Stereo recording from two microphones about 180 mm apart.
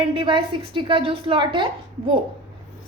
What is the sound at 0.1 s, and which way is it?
A woman's voice, 30° right (ahead or behind).